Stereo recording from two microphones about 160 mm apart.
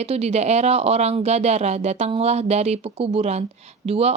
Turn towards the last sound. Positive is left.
turn(degrees=-40)  # may be behind; listen again after turning